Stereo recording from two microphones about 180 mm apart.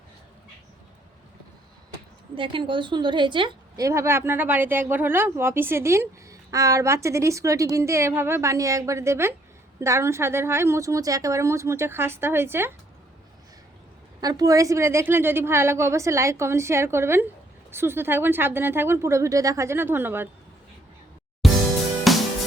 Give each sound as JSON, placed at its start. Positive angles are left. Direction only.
{"t": 2.3, "sound": "a woman's voice", "side_deg": -30}
{"t": 14.2, "sound": "a woman's voice", "side_deg": -20}
{"t": 21.4, "sound": "music", "side_deg": 0}